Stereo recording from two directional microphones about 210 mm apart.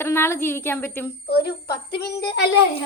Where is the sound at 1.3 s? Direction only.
50° left (ahead or behind).